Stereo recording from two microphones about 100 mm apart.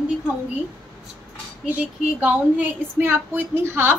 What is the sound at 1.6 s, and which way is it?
Speech, 15° right (ahead or behind).